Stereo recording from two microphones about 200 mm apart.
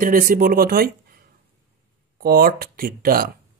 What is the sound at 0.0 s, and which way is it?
Speech, 45° right (ahead or behind).